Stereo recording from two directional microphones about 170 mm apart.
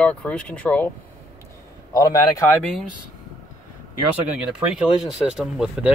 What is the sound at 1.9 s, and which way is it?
Speech, 20° left (ahead or behind).